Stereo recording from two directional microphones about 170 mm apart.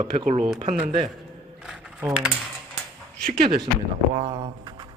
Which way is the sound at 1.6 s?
5° right (ahead or behind).